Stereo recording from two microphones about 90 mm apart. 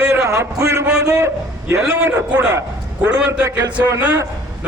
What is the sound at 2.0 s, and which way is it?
A man's voice, 20° right (ahead or behind).